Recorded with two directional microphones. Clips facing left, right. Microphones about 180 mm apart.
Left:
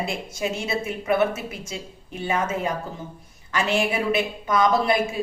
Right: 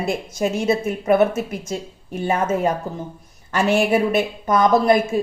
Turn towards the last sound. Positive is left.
turn(degrees=-45)  # may be behind; listen again after turning